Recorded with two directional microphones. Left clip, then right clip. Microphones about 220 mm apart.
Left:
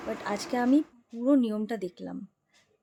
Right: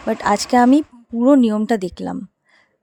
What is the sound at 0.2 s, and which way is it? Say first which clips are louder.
Speech: right 17 dB; 45° right (ahead or behind).